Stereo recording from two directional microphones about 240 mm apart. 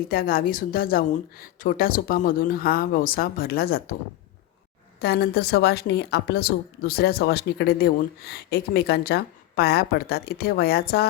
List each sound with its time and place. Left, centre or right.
0.1 s a woman's voice: left
4.9 s a woman's voice: left